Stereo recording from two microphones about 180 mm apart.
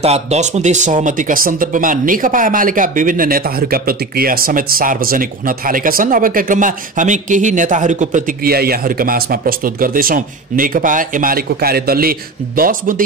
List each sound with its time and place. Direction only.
0.0 s speech: 35° right (ahead or behind)